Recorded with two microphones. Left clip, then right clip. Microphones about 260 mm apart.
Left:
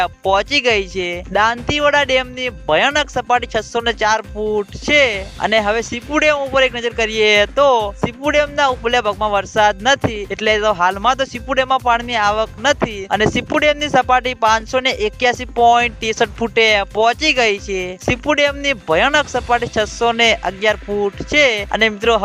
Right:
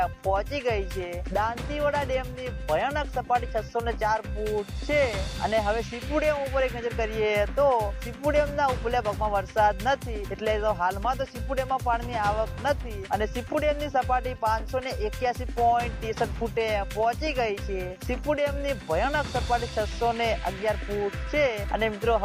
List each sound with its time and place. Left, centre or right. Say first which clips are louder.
0.0 s speech: left 10 dB; left